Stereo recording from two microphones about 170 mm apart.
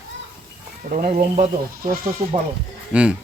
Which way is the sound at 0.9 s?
50° right (ahead or behind).